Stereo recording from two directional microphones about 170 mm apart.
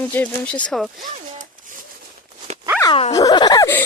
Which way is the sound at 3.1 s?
20° left (ahead or behind).